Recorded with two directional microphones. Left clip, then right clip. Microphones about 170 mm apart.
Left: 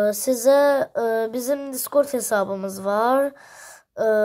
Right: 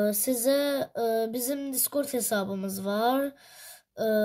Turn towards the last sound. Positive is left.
turn(degrees=20)  # may be behind; listen again after turning